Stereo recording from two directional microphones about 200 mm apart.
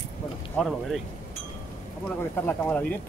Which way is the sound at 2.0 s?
5° left (ahead or behind).